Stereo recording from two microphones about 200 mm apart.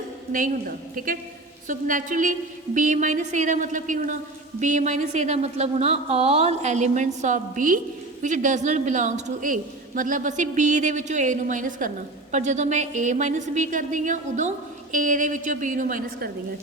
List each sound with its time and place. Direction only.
0.9 s a woman's voice: 45° right (ahead or behind)